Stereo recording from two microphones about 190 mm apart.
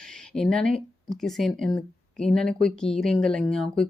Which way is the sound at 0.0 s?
5° left (ahead or behind).